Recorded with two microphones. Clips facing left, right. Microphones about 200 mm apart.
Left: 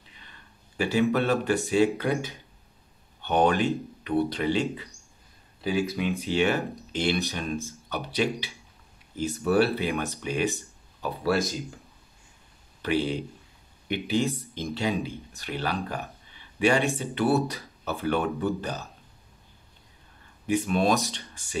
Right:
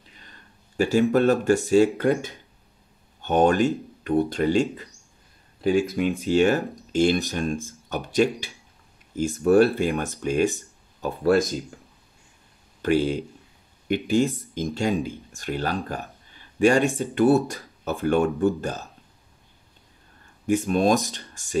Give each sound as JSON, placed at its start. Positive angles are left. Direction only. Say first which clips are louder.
{"t": 0.2, "sound": "a sound", "louder": "right 2 dB", "side_deg": -45}
{"t": 1.1, "sound": "speech", "louder": "right 5 dB", "side_deg": -45}
{"t": 12.8, "sound": "speech", "louder": "right 5 dB", "side_deg": -45}
{"t": 16.3, "sound": "a sound", "louder": "right 5 dB", "side_deg": -45}
{"t": 16.9, "sound": "speech", "louder": "right 5 dB", "side_deg": -50}
{"t": 20.4, "sound": "speech", "louder": "right 3 dB", "side_deg": -45}